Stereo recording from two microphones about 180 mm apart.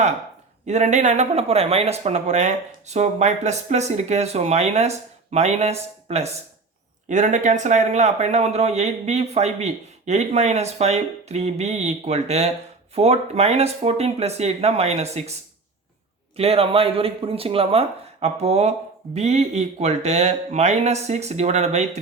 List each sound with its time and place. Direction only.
0.7 s speech: 40° right (ahead or behind)
16.4 s speech: 35° right (ahead or behind)